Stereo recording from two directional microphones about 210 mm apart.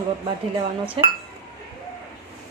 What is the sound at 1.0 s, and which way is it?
Speech, 25° right (ahead or behind).